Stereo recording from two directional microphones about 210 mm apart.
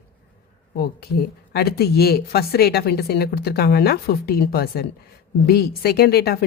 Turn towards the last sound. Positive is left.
turn(degrees=50)  # may be behind; listen again after turning